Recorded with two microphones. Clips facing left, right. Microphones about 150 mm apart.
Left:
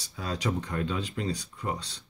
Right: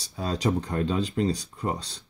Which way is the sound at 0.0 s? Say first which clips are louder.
Right 5 dB; 35° right (ahead or behind).